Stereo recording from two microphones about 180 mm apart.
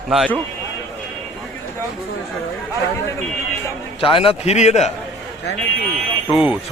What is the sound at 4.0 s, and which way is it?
Speech, 30° left (ahead or behind).